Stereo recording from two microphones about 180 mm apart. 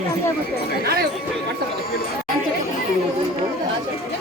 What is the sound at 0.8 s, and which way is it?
Speech, 60° right (ahead or behind).